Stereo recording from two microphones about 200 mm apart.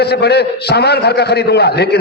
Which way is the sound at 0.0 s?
55° left (ahead or behind).